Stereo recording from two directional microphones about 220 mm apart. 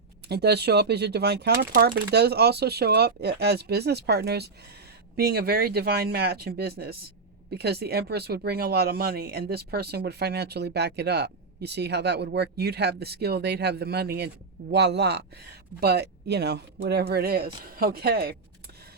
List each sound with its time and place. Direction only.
0.3 s speech: 50° right (ahead or behind)